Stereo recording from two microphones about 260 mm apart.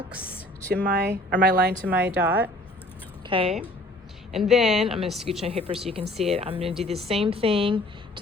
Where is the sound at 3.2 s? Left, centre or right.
Centre.